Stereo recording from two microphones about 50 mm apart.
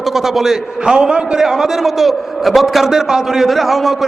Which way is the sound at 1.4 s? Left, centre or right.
Centre.